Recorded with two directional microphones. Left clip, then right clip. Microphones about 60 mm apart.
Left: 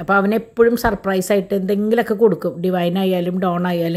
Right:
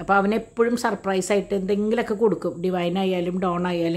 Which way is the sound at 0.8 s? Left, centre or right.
Left.